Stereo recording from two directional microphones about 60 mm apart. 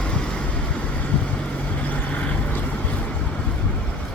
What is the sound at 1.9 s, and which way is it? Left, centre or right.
Vehicle, left.